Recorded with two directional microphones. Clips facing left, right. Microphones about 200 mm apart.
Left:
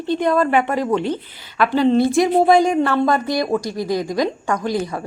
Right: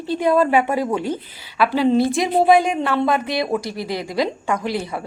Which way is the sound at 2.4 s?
20° right (ahead or behind).